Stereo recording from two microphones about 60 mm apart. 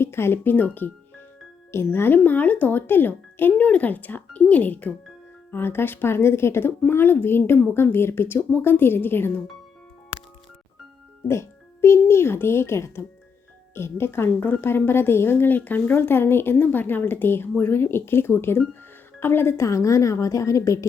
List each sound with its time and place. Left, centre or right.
0.0 s speech: left
1.7 s speech: left
5.5 s speech: left
11.3 s speech: left
14.3 s speech: left